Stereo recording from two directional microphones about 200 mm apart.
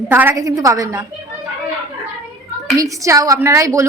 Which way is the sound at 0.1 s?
10° right (ahead or behind).